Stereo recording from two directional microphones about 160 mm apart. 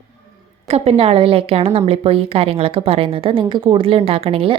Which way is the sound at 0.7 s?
40° right (ahead or behind).